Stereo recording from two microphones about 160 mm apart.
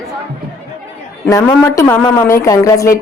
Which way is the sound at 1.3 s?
20° left (ahead or behind).